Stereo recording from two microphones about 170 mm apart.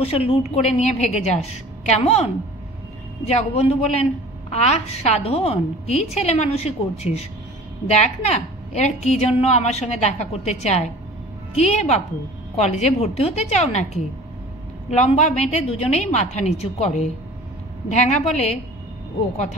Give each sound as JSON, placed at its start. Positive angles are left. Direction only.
{"t": 0.3, "sound": "a woman's voice", "side_deg": 40}